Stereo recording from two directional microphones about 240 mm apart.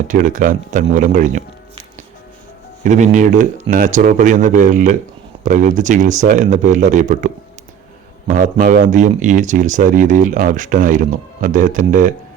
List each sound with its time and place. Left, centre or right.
0.1 s speech: right
2.8 s speech: right
8.3 s speech: right